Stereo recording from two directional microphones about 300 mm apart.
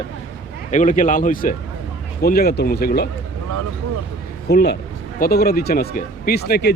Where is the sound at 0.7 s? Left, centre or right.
Left.